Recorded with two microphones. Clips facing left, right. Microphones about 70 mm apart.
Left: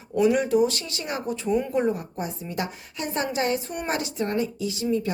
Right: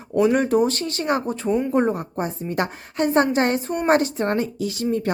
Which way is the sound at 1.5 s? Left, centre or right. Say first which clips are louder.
Right 3 dB; right.